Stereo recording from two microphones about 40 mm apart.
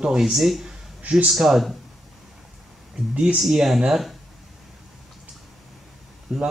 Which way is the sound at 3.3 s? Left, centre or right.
Centre.